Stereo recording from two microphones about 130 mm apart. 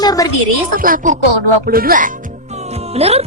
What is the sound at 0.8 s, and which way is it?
Speech, 85° right.